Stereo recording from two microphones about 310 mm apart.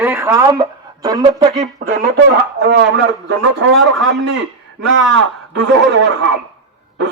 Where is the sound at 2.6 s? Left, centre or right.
Right.